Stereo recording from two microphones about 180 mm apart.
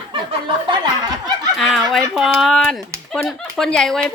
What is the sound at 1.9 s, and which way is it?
Speech, centre (ahead or behind).